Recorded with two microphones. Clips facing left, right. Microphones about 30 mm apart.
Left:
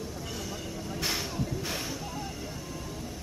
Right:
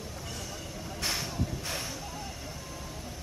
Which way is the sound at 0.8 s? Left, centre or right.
Centre.